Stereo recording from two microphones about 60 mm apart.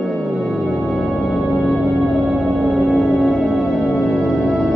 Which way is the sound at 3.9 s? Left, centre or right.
Centre.